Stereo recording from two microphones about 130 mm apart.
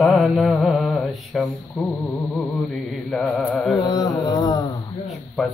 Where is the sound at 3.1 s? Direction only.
5° left (ahead or behind).